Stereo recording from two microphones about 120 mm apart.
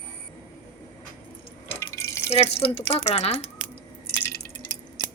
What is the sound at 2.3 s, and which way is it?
Speech, 60° left (ahead or behind).